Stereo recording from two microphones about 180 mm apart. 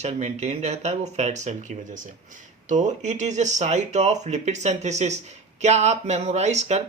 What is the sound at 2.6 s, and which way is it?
Speech, 45° right (ahead or behind).